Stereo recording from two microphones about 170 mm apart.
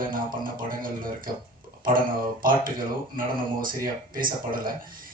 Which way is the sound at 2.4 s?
55° right (ahead or behind).